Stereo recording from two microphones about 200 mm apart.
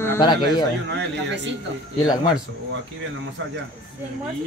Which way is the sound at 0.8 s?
60° right (ahead or behind).